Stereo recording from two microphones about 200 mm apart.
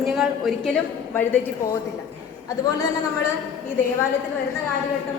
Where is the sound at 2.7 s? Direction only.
15° left (ahead or behind).